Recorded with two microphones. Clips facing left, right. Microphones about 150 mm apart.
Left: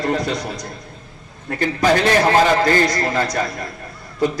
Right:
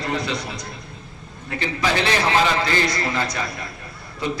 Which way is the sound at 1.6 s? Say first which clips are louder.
Left 6 dB; 45° left (ahead or behind).